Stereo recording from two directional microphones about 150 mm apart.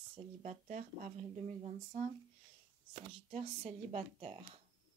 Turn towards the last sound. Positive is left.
turn(degrees=-45)  # may be behind; listen again after turning